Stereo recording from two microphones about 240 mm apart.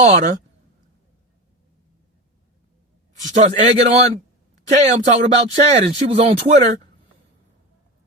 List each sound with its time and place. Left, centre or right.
0.0 s speech: right
3.2 s speech: right